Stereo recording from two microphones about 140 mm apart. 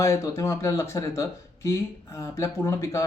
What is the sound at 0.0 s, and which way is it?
Speech, 20° left (ahead or behind).